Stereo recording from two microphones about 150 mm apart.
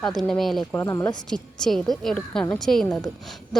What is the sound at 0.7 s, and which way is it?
Speech, 20° left (ahead or behind).